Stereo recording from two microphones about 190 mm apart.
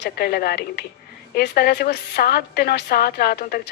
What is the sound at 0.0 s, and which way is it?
Speech, 55° left (ahead or behind).